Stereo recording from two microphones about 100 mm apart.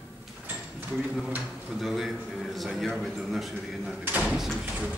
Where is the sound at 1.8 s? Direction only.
Centre (ahead or behind).